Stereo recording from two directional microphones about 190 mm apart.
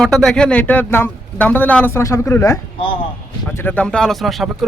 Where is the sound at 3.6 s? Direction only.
10° left (ahead or behind).